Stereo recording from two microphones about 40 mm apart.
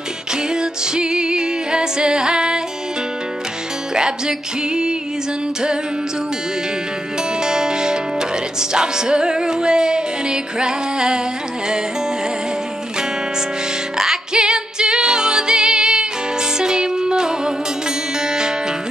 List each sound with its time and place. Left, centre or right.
0.3 s music: centre
3.9 s music: centre
7.4 s music: centre
14.3 s music: right